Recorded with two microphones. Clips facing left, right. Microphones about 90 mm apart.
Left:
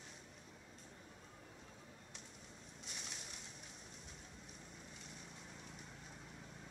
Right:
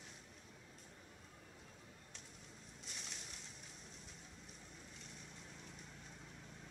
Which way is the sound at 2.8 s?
5° left (ahead or behind).